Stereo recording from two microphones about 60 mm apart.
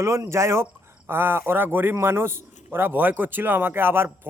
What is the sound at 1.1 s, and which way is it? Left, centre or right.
A man's voice, right.